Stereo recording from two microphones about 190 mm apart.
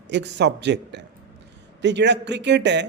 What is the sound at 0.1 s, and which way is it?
A man's voice, 65° right (ahead or behind).